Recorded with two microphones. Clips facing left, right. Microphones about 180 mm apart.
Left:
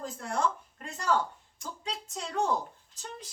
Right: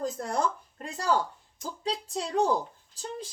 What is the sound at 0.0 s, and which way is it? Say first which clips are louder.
Speech: right 2 dB; 40° right (ahead or behind).